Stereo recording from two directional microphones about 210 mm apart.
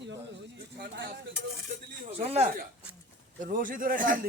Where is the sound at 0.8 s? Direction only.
55° right (ahead or behind).